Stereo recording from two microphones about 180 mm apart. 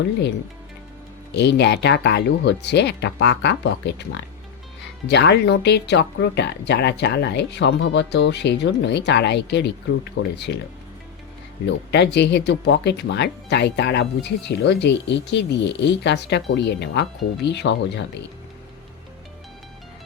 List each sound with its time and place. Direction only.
1.3 s speech: 70° left (ahead or behind)
11.6 s speech: 70° left (ahead or behind)